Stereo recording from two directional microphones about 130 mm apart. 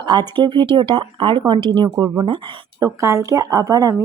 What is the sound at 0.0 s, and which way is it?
Speech, 35° right (ahead or behind).